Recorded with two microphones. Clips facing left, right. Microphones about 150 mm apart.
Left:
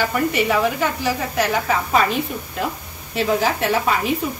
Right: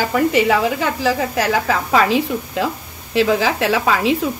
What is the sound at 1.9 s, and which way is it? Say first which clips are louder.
A woman's voice: right 5 dB; 90° right.